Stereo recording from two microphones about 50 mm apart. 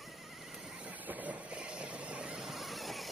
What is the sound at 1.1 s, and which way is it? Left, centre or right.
Vehicle, right.